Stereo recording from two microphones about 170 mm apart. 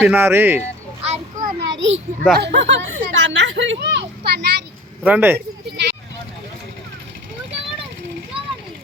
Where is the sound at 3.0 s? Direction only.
90° right.